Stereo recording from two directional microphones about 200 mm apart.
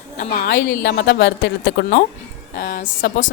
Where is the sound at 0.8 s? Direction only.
60° left (ahead or behind).